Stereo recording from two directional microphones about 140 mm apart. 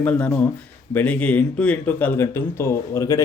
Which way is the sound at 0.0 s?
10° left (ahead or behind).